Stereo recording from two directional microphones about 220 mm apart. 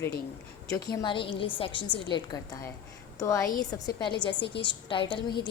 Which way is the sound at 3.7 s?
20° left (ahead or behind).